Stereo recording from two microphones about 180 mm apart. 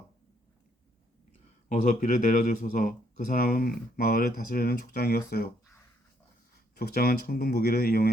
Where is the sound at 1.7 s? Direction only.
45° left (ahead or behind).